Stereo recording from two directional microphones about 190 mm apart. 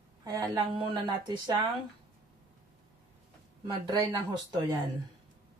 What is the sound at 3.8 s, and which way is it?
Speech, 20° right (ahead or behind).